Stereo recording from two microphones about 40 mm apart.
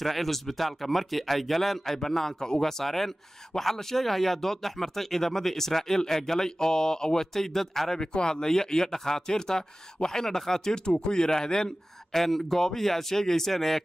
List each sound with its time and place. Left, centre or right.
0.0 s speech: centre
8.0 s speech: left
12.2 s speech: centre